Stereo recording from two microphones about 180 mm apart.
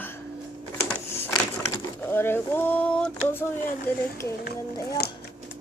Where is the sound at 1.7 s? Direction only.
10° left (ahead or behind).